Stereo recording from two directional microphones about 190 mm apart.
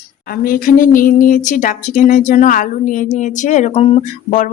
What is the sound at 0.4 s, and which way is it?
Speech, 50° left (ahead or behind).